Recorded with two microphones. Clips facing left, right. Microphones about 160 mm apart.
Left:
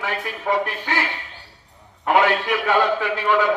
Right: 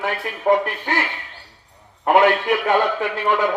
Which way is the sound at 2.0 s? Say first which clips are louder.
Right 3 dB; 50° right (ahead or behind).